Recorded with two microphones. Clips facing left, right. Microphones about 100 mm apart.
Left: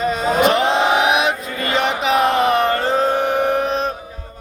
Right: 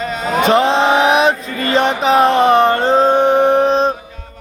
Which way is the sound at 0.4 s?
30° right (ahead or behind).